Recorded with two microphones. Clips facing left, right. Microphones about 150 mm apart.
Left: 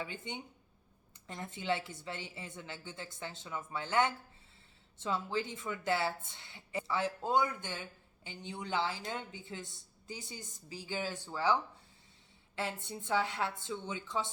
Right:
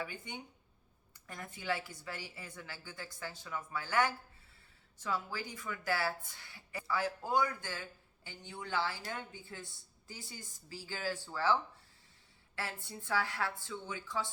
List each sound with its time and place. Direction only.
0.0 s speech: 20° left (ahead or behind)
12.5 s speech: 20° left (ahead or behind)